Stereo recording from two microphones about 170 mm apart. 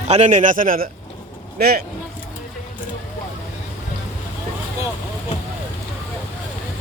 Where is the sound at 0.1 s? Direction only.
45° right (ahead or behind).